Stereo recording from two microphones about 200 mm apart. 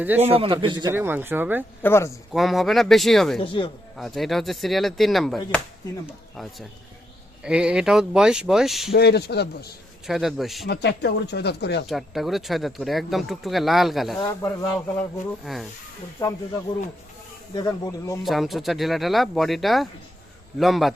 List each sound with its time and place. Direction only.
0.3 s a man's voice: 25° right (ahead or behind)
0.9 s speech: 10° right (ahead or behind)
1.8 s speech: 10° left (ahead or behind)
2.3 s speech: centre (ahead or behind)
3.4 s speech: 25° left (ahead or behind)
3.9 s speech: centre (ahead or behind)
9.0 s speech: 55° left (ahead or behind)
10.1 s speech: centre (ahead or behind)
10.7 s speech: 55° left (ahead or behind)
11.9 s speech: centre (ahead or behind)
14.2 s speech: 15° left (ahead or behind)
16.2 s speech: 15° left (ahead or behind)
17.5 s speech: 20° left (ahead or behind)
18.2 s speech: centre (ahead or behind)